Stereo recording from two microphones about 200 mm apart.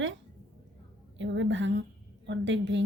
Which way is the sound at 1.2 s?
65° right (ahead or behind).